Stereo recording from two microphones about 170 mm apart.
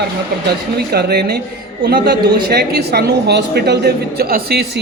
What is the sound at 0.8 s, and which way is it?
A woman's voice, 70° right (ahead or behind).